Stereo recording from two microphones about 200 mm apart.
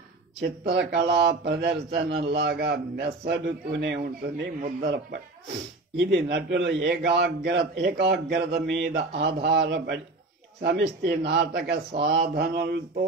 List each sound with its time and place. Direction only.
0.4 s a man's voice: 55° right (ahead or behind)